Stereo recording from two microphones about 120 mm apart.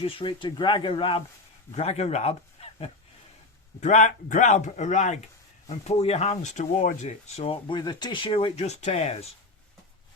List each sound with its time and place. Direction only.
0.0 s speech: 45° left (ahead or behind)
1.7 s speech: 65° left (ahead or behind)
3.8 s speech: 90° left
5.6 s speech: 60° left (ahead or behind)
7.5 s speech: 40° left (ahead or behind)
8.5 s speech: 65° left (ahead or behind)